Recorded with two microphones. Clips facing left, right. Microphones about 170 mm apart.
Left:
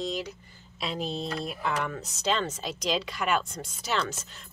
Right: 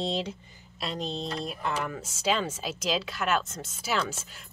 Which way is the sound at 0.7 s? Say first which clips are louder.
Left 1 dB; 5° left (ahead or behind).